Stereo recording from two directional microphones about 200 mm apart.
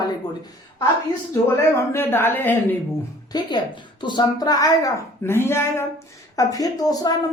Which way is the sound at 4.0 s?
20° left (ahead or behind).